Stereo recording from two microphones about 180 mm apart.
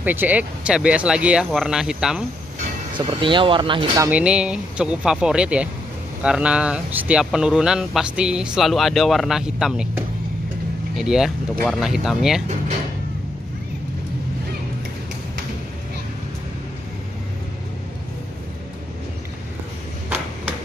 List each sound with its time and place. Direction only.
0.0 s speech: 10° right (ahead or behind)
3.0 s speech: 25° right (ahead or behind)
4.1 s speech: 5° right (ahead or behind)